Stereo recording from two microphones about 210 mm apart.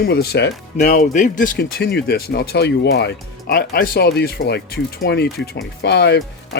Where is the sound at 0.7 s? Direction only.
35° left (ahead or behind).